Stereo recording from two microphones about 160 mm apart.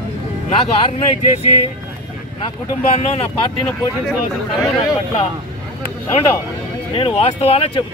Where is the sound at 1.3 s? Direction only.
40° left (ahead or behind).